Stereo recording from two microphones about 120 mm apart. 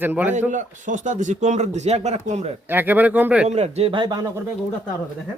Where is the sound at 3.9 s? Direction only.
35° right (ahead or behind).